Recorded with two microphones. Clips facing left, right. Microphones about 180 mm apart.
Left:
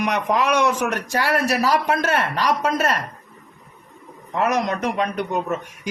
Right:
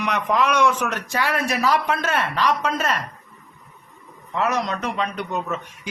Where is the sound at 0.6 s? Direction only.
40° left (ahead or behind).